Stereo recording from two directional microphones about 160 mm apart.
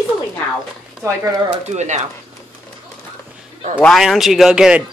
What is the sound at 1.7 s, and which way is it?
Speech, 45° right (ahead or behind).